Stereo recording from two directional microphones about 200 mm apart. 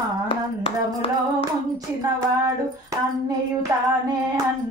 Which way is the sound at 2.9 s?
15° right (ahead or behind).